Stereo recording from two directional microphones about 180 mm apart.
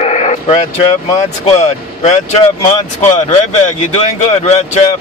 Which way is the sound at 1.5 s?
40° left (ahead or behind).